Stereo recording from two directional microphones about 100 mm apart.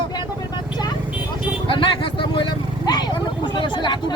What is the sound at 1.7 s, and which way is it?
Speech, 55° left (ahead or behind).